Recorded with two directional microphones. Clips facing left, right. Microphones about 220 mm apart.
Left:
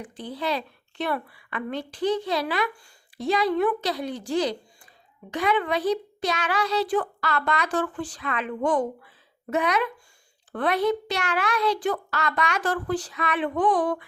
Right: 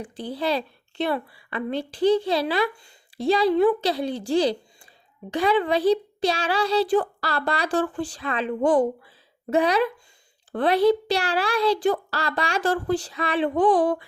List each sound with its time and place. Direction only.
0.0 s a woman's voice: 30° right (ahead or behind)